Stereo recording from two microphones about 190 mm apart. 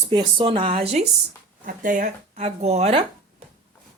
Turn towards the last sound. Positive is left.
turn(degrees=-30)  # may be behind; listen again after turning